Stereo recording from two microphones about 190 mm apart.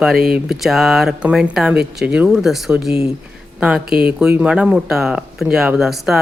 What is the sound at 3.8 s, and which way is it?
Speech, 55° right (ahead or behind).